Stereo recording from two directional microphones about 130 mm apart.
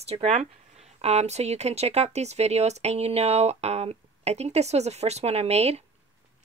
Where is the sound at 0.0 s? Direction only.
55° right (ahead or behind).